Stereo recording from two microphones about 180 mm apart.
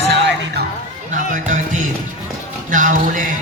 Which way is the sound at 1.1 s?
45° right (ahead or behind).